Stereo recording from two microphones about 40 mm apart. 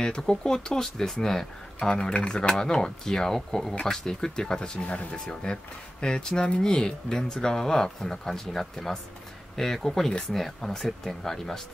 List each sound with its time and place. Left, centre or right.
0.0 s speech: centre